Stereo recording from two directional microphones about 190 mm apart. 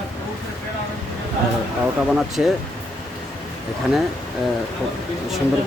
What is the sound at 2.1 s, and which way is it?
Speech, centre (ahead or behind).